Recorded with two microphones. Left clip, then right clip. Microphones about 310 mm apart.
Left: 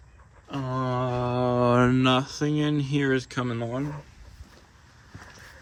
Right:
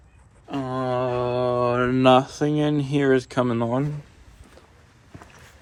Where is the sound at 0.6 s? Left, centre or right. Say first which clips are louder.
Right 4 dB; centre.